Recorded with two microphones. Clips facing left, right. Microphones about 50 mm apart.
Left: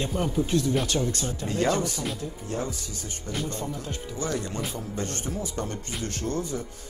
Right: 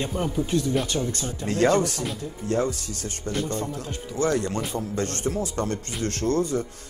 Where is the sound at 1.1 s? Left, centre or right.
Right.